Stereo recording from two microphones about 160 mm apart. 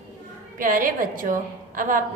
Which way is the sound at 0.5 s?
55° right (ahead or behind).